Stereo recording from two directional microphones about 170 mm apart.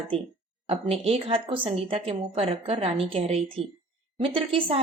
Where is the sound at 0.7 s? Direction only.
35° right (ahead or behind).